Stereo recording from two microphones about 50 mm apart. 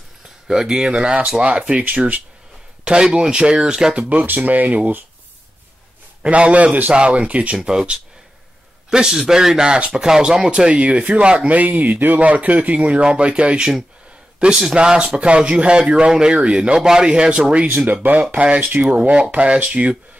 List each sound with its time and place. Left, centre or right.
0.5 s speech: centre
2.8 s speech: centre
3.9 s speech: right
6.2 s speech: right
17.6 s speech: right